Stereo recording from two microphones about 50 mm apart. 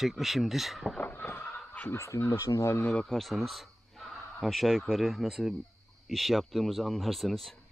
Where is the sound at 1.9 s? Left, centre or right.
Left.